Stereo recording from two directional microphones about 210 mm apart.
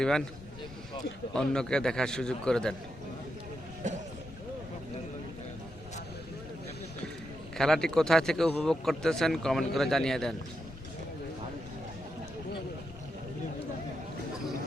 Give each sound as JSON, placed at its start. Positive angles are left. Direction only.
{"t": 1.3, "sound": "a man's voice", "side_deg": 5}
{"t": 3.8, "sound": "a sound", "side_deg": -35}
{"t": 7.5, "sound": "a man's voice", "side_deg": 0}